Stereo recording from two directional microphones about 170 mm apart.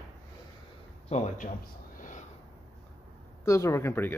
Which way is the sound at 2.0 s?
45° left (ahead or behind).